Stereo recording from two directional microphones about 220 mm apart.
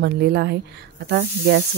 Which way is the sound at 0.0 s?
50° right (ahead or behind).